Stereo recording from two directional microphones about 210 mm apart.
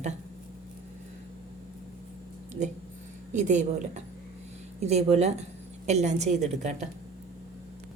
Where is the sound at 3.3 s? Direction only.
35° right (ahead or behind).